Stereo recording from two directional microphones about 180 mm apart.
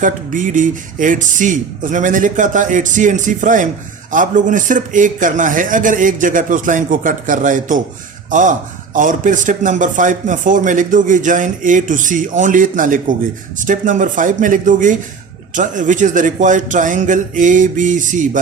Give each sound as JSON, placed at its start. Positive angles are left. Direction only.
{"t": 0.0, "sound": "a man's voice", "side_deg": -45}